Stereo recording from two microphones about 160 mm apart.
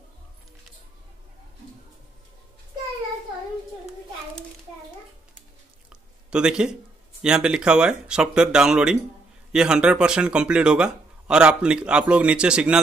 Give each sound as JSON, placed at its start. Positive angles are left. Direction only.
{"t": 5.9, "sound": "speech", "side_deg": -5}